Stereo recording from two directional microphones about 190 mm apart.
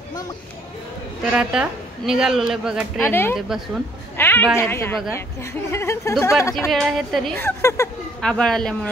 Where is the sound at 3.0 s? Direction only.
10° left (ahead or behind).